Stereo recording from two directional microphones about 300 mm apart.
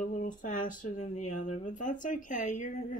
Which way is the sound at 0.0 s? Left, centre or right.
Left.